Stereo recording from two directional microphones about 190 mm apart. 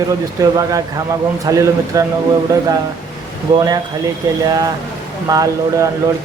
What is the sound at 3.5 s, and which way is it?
Speech, 20° right (ahead or behind).